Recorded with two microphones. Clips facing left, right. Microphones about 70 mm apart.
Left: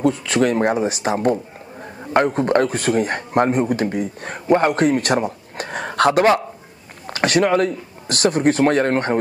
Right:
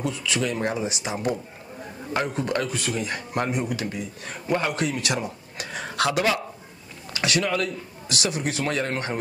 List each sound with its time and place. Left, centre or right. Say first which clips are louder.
0.0 s a man's voice: left 9 dB; left